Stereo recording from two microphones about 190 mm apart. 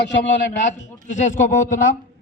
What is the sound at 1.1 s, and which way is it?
Speech, 40° left (ahead or behind).